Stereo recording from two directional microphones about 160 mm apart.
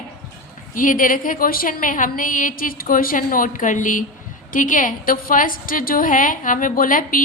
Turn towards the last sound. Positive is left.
turn(degrees=60)  # may be behind; listen again after turning